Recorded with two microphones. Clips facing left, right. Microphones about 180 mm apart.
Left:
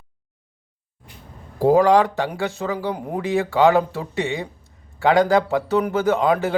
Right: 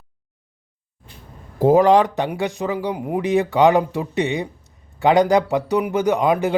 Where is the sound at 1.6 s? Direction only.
20° right (ahead or behind).